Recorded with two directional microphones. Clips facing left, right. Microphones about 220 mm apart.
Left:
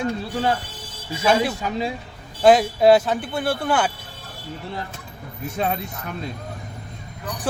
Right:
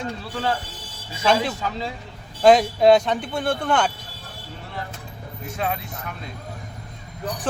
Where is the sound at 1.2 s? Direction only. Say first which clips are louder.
Left 1 dB; 10° left (ahead or behind).